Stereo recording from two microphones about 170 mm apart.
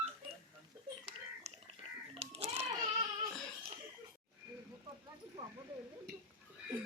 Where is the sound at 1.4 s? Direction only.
40° right (ahead or behind).